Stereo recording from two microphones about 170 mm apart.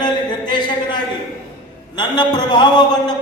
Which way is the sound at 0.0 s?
25° left (ahead or behind).